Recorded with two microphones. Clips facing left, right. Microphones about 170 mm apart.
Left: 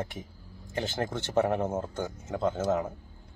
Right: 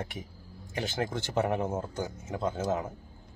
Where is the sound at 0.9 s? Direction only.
15° right (ahead or behind).